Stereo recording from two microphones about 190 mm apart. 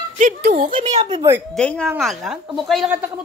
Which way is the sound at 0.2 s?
50° right (ahead or behind).